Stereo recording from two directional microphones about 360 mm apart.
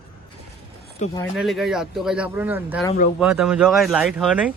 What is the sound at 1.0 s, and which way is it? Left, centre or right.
Speech, centre.